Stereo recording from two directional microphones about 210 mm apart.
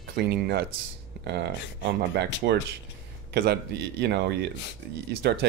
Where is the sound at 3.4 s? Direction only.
50° right (ahead or behind).